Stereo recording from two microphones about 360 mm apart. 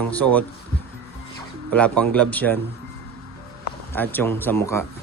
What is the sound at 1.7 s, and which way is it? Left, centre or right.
Speech, centre.